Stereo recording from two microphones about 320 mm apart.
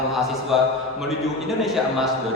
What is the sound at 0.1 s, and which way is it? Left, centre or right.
A man's voice, centre.